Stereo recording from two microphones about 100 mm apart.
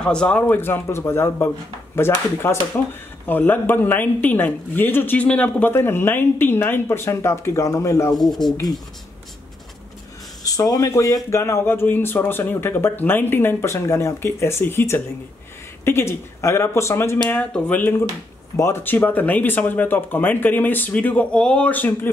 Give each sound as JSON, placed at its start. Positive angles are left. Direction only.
{"t": 0.0, "sound": "speech", "side_deg": 10}
{"t": 8.2, "sound": "speech", "side_deg": 0}
{"t": 10.4, "sound": "speech", "side_deg": 35}
{"t": 17.4, "sound": "speech", "side_deg": 15}